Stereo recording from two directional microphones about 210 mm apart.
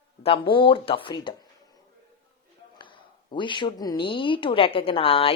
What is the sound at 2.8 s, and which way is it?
Speech, 20° left (ahead or behind).